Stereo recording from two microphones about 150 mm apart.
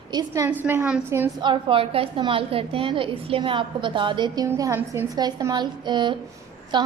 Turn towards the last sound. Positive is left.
turn(degrees=-30)  # may be behind; listen again after turning